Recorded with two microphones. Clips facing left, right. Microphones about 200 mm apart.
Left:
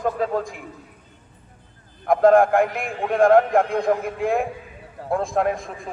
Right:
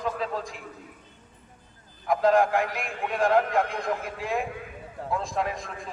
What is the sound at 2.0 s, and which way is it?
A man's voice, 50° left (ahead or behind).